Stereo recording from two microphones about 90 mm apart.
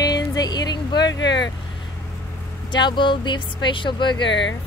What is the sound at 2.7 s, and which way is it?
Speech, 60° left (ahead or behind).